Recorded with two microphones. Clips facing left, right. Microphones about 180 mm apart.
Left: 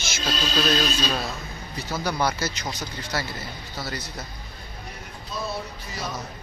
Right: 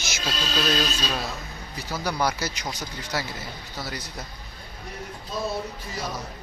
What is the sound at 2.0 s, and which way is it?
Speech, 10° right (ahead or behind).